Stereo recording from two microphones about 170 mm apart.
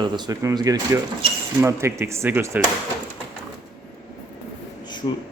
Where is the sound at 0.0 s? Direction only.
25° right (ahead or behind).